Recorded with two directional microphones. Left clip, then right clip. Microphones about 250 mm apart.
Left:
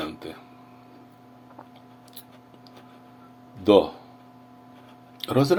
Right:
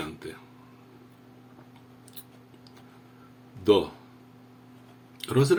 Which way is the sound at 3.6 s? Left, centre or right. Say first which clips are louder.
Left 4 dB; centre.